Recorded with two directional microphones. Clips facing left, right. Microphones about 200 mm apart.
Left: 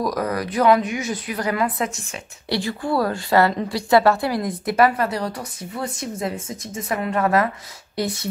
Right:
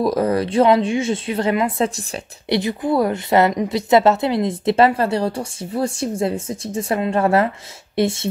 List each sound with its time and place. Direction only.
0.0 s a woman's voice: 30° right (ahead or behind)